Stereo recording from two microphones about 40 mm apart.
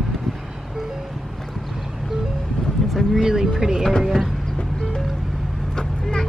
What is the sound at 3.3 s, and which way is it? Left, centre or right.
Speech, centre.